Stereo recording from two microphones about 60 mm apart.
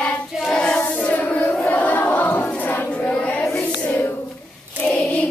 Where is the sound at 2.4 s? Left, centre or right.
Left.